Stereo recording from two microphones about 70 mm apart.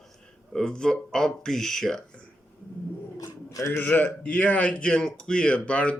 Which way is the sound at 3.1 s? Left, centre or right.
Left.